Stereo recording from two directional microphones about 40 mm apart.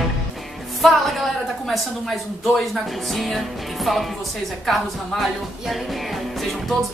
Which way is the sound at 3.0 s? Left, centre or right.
Centre.